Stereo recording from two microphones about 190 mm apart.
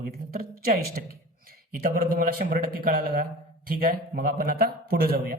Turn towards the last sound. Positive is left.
turn(degrees=-55)  # may be behind; listen again after turning